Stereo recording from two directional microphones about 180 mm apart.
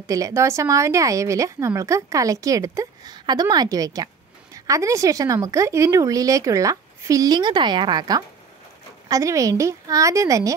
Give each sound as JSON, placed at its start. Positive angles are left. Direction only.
{"t": 0.0, "sound": "a woman's voice", "side_deg": -20}